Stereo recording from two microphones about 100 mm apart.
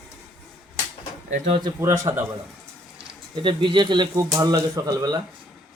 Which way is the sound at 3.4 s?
55° right (ahead or behind).